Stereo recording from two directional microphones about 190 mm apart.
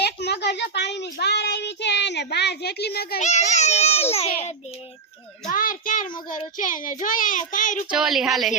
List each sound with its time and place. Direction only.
0.0 s speech: 60° left (ahead or behind)
3.2 s a child's voice: 35° left (ahead or behind)
5.5 s a child's voice: 45° left (ahead or behind)
7.9 s a woman's voice: centre (ahead or behind)